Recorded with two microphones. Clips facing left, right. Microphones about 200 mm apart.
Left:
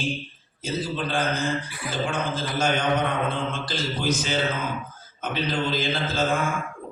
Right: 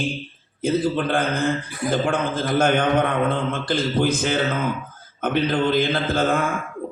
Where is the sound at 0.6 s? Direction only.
55° right (ahead or behind).